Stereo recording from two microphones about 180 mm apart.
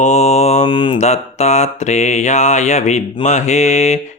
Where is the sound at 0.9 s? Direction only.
40° left (ahead or behind).